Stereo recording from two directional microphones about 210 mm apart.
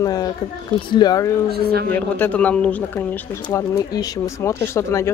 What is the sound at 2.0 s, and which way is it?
Speech, 5° left (ahead or behind).